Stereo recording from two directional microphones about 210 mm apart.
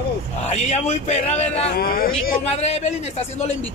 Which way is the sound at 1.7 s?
45° left (ahead or behind).